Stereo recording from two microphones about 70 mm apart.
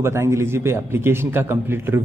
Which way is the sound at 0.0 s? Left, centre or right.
Right.